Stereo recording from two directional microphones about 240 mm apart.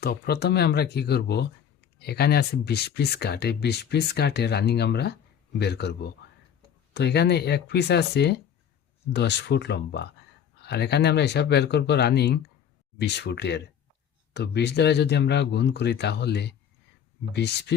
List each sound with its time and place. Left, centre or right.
0.0 s speech: left